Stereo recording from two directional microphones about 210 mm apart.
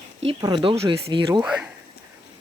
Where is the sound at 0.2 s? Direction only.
25° right (ahead or behind).